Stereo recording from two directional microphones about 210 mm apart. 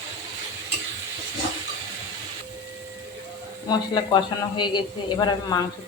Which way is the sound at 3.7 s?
20° left (ahead or behind).